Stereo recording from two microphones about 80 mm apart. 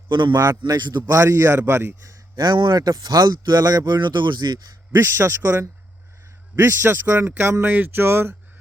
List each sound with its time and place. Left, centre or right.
0.1 s a man's voice: right
1.0 s a man's voice: right
2.3 s speech: right
4.9 s a man's voice: right
7.2 s a sound: right